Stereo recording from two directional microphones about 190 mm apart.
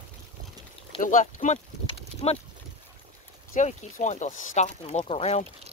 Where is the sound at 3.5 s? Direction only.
40° left (ahead or behind).